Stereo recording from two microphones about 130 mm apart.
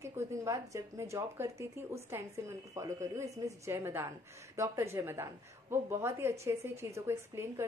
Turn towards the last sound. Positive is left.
turn(degrees=-20)  # may be behind; listen again after turning